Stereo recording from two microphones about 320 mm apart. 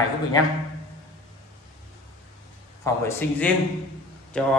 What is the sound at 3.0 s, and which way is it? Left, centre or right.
A man's voice, centre.